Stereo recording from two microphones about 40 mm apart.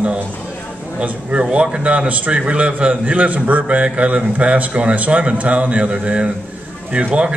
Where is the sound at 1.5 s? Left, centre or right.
Right.